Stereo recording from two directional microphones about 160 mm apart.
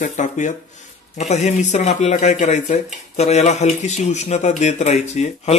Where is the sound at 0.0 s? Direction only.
50° left (ahead or behind).